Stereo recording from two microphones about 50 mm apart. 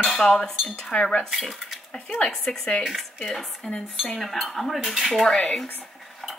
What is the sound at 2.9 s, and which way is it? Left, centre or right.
Dishes, centre.